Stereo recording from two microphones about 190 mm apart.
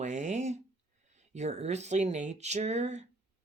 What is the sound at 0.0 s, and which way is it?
Speech, 40° right (ahead or behind).